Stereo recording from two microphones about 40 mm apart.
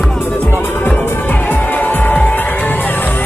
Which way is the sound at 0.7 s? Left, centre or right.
Left.